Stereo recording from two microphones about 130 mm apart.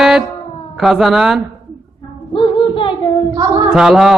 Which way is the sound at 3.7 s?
5° right (ahead or behind).